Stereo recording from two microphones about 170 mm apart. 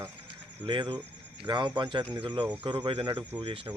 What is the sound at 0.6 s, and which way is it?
Speech, 30° right (ahead or behind).